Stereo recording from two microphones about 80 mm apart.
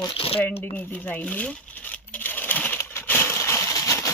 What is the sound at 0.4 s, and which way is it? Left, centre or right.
Crumpling, left.